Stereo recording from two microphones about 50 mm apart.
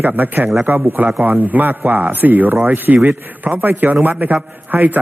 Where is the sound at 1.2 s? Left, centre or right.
Right.